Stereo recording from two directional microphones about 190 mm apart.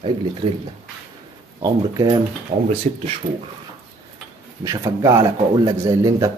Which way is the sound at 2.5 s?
40° right (ahead or behind).